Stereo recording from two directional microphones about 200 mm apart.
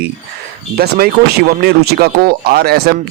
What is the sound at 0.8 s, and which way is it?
Speech, 50° right (ahead or behind).